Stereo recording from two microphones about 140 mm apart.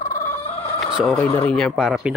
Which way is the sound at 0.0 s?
65° left (ahead or behind).